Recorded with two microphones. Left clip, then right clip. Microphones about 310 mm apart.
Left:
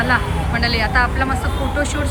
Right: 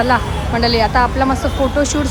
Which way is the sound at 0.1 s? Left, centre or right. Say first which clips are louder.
Right 2 dB; centre.